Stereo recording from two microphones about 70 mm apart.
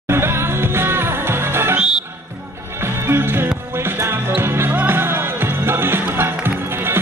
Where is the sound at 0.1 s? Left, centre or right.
Right.